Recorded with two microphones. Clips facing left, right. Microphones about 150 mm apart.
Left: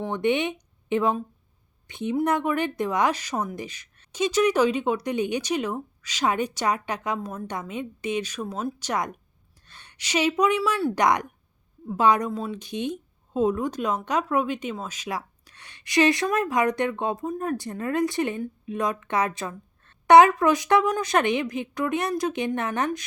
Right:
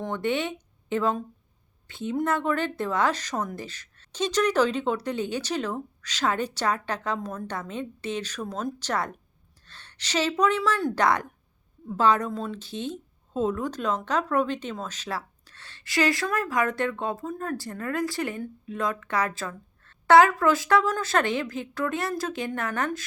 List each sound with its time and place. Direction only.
0.0 s speech: 15° left (ahead or behind)